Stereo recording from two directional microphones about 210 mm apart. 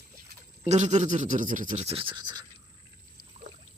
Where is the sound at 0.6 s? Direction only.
35° right (ahead or behind).